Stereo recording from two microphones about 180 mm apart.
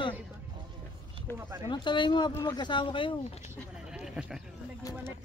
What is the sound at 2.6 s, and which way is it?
Speech, 25° left (ahead or behind).